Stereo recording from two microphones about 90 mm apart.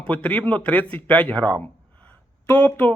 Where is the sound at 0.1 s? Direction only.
15° left (ahead or behind).